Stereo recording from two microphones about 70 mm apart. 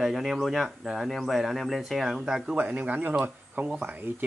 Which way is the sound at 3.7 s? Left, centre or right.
Centre.